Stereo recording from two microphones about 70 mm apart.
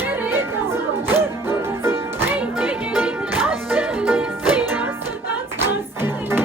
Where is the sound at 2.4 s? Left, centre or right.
Centre.